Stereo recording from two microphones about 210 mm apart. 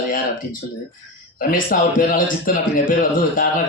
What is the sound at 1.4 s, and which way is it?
A man's voice, 45° left (ahead or behind).